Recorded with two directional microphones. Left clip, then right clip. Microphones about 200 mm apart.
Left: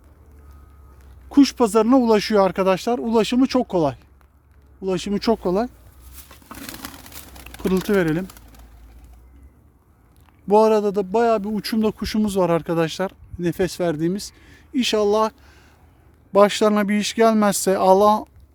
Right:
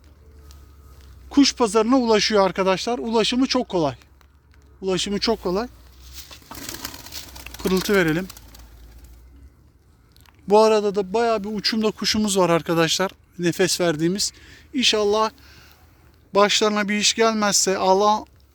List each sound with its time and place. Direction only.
1.3 s a man's voice: 25° left (ahead or behind)
5.2 s speech: 30° left (ahead or behind)
6.2 s a sound: 50° left (ahead or behind)
7.4 s speech: 20° left (ahead or behind)
10.4 s a man's voice: 15° left (ahead or behind)